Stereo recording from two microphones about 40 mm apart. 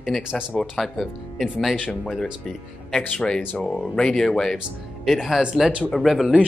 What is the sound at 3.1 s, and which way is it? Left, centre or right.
Speech, left.